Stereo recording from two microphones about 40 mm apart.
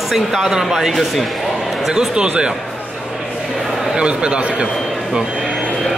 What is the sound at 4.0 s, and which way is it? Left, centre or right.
Speech, right.